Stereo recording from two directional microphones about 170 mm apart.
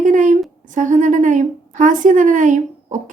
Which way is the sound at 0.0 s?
50° right (ahead or behind).